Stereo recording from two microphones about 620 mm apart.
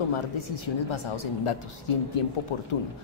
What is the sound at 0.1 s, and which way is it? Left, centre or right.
Speech, left.